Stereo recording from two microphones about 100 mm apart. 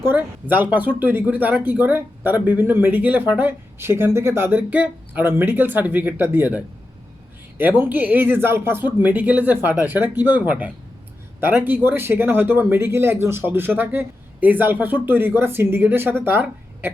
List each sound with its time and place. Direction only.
0.0 s speech: 20° right (ahead or behind)
7.6 s speech: 20° right (ahead or behind)